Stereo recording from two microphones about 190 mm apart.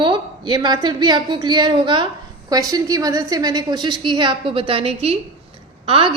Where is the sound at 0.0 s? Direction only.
25° right (ahead or behind).